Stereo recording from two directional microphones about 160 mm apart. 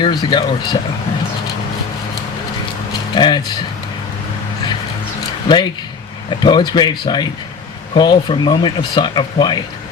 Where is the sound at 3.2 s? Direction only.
30° left (ahead or behind).